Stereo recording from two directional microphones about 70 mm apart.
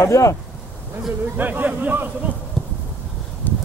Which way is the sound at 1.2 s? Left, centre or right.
Right.